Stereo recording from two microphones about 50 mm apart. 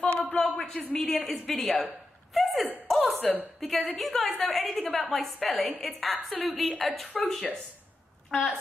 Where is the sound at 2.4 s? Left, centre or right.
Centre.